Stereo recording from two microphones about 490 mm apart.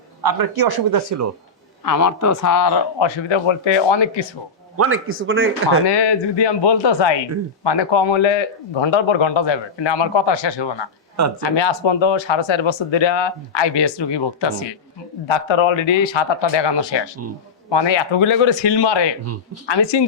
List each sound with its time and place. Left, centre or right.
0.2 s speech: right
1.8 s speech: left
3.2 s speech: left
4.8 s speech: right
5.8 s speech: left
15.3 s speech: left